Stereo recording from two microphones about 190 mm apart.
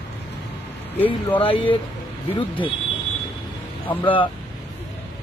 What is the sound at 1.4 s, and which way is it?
Speech, 25° left (ahead or behind).